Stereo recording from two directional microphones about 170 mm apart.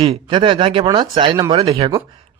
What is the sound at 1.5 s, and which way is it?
Speech, 35° right (ahead or behind).